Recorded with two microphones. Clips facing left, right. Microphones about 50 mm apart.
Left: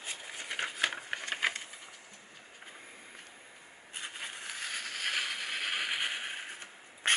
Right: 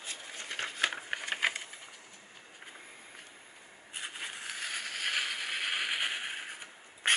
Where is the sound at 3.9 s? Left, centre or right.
Centre.